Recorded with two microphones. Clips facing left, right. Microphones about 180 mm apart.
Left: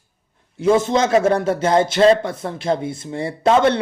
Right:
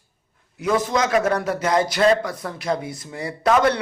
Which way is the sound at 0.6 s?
25° left (ahead or behind).